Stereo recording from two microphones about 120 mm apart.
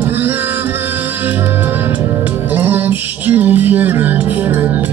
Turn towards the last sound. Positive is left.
turn(degrees=-15)  # may be behind; listen again after turning